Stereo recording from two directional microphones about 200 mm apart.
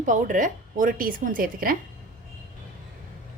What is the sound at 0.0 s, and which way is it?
A woman's voice, 40° right (ahead or behind).